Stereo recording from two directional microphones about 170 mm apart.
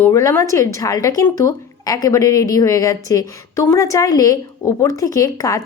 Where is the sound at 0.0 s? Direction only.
20° left (ahead or behind).